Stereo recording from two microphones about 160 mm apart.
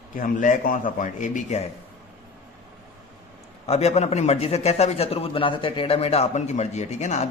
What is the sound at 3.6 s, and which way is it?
A man's voice, 40° left (ahead or behind).